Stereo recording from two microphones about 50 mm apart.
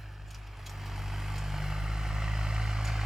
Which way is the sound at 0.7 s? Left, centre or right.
Centre.